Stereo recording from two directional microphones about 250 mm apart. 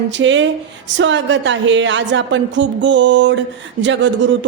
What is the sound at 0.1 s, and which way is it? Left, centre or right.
A woman's voice, right.